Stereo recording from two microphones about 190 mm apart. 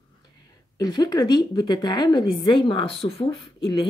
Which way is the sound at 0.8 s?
20° left (ahead or behind).